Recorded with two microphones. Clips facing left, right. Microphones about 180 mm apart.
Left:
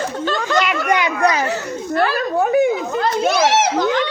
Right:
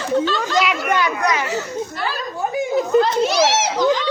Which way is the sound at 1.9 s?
60° left (ahead or behind).